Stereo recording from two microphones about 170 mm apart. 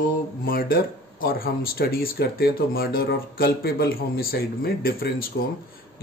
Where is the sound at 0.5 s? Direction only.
60° left (ahead or behind).